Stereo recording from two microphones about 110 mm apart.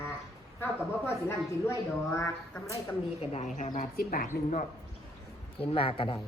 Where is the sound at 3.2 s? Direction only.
75° left (ahead or behind).